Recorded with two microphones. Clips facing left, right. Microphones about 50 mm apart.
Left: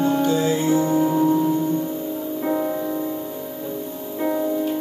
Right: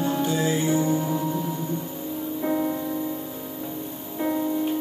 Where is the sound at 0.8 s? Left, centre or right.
Left.